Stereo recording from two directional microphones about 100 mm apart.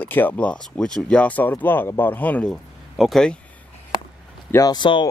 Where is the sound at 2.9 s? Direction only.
Centre (ahead or behind).